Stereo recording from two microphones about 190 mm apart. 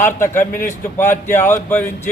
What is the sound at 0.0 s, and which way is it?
Speech, 10° left (ahead or behind).